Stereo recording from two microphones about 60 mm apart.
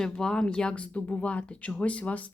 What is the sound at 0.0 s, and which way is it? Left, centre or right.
Speech, centre.